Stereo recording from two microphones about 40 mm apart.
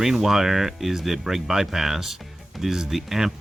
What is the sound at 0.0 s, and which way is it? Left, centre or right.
Speech, centre.